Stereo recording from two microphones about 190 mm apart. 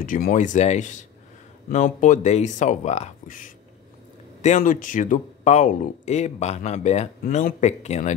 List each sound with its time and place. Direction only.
0.0 s speech: 45° left (ahead or behind)